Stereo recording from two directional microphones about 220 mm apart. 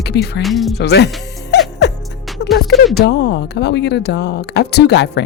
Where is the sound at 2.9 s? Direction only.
50° left (ahead or behind).